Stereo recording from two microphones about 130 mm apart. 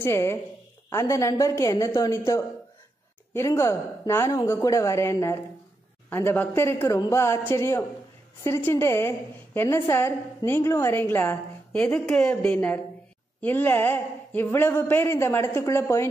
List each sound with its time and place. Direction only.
0.0 s a woman's voice: 20° left (ahead or behind)